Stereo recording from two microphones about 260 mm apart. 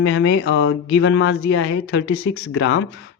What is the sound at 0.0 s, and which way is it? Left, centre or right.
Speech, left.